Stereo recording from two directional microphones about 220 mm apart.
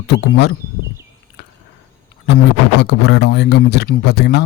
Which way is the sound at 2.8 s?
50° left (ahead or behind).